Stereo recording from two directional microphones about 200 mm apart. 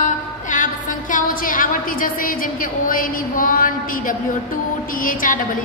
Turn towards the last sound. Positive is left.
turn(degrees=40)  # may be behind; listen again after turning